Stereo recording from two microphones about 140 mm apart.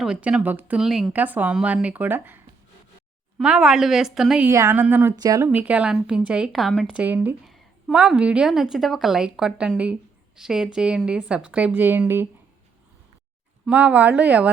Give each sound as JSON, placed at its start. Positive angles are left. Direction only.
{"t": 0.0, "sound": "a woman's voice", "side_deg": -5}
{"t": 4.4, "sound": "speech", "side_deg": -20}
{"t": 5.2, "sound": "speech", "side_deg": -25}
{"t": 5.5, "sound": "speech", "side_deg": -10}
{"t": 7.4, "sound": "a woman's voice", "side_deg": 0}
{"t": 13.7, "sound": "speech", "side_deg": -10}